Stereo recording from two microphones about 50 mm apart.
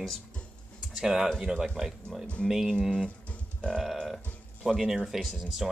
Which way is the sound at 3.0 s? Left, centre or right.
Left.